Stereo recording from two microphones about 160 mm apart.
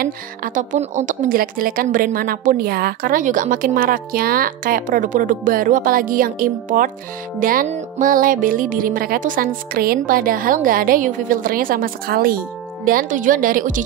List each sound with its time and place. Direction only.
0.0 s a woman's voice: 55° right (ahead or behind)